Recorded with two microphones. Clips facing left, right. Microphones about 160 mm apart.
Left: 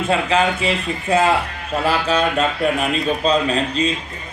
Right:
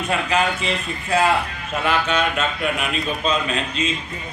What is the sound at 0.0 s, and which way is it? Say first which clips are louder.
Speech: left 3 dB; 30° left (ahead or behind).